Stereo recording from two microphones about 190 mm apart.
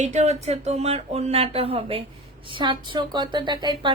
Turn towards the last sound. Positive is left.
turn(degrees=-25)  # may be behind; listen again after turning